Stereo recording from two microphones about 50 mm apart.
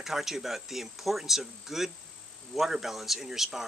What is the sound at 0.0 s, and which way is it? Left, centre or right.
Speech, centre.